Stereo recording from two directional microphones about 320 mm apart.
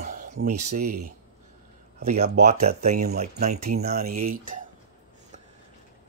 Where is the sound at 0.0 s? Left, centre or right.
Right.